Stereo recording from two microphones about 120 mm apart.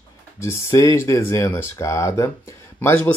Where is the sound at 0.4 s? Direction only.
25° left (ahead or behind).